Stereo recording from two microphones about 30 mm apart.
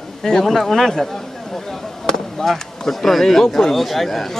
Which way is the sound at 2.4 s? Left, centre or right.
Centre.